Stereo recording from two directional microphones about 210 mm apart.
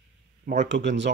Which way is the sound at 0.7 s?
55° right (ahead or behind).